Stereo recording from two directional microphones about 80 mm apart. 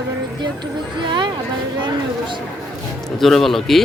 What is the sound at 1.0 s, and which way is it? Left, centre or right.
Speech, right.